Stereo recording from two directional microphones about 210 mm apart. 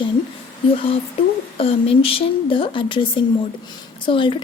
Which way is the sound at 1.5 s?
25° left (ahead or behind).